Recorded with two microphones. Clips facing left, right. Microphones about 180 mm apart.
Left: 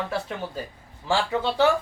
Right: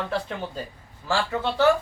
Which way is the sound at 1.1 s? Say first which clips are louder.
Left 1 dB; 15° left (ahead or behind).